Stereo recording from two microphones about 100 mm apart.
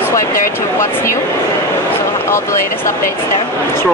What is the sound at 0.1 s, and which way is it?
Speech, 30° left (ahead or behind).